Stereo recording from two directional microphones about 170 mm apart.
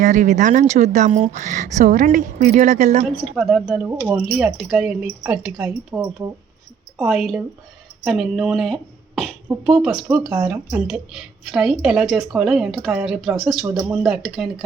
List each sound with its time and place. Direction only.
0.0 s speech: 45° right (ahead or behind)
3.3 s a woman's voice: centre (ahead or behind)